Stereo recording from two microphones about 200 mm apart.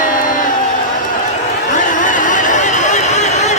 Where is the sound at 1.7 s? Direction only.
40° left (ahead or behind).